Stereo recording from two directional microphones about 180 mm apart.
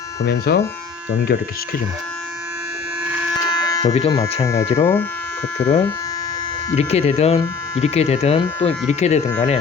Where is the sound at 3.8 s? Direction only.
35° left (ahead or behind).